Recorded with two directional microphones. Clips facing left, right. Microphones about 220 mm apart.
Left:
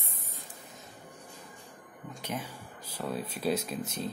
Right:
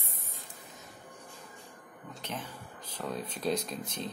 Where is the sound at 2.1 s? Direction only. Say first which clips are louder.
Left 3 dB; 10° left (ahead or behind).